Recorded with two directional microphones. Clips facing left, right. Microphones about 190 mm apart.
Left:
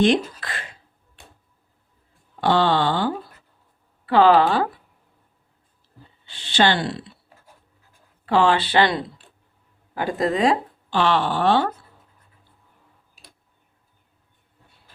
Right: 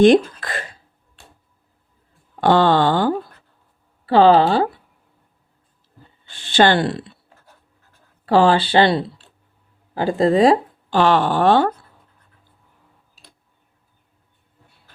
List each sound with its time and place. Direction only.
0.4 s a sound: 45° right (ahead or behind)
2.4 s speech: 50° right (ahead or behind)
4.0 s speech: 30° right (ahead or behind)
6.2 s speech: 50° right (ahead or behind)
8.3 s speech: 35° right (ahead or behind)